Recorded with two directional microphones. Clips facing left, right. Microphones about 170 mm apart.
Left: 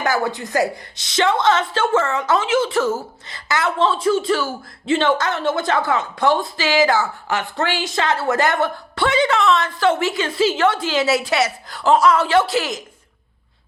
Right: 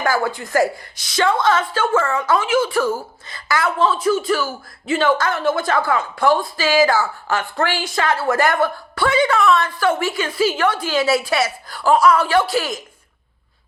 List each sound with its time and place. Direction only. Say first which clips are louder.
0.0 s a woman's voice: even; 20° left (ahead or behind)